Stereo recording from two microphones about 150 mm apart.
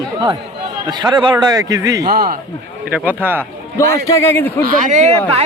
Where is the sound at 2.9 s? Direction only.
10° right (ahead or behind).